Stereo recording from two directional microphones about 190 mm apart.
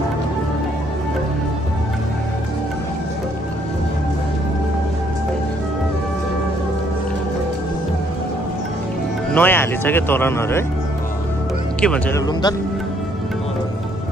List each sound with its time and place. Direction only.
9.3 s speech: 10° left (ahead or behind)
11.8 s speech: 5° left (ahead or behind)
12.3 s speech: 20° left (ahead or behind)